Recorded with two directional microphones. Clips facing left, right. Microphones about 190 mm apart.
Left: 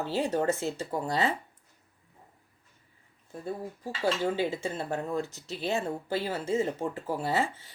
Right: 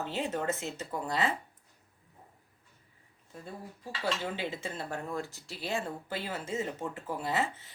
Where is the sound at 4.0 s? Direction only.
30° left (ahead or behind).